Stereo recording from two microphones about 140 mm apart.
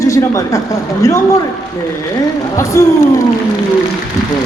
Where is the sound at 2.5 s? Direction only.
20° left (ahead or behind).